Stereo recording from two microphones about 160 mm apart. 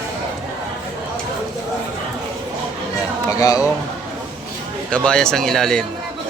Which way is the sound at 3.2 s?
20° left (ahead or behind).